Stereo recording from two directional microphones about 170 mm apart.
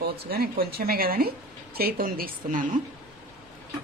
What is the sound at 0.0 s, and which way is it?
Speech, 60° right (ahead or behind).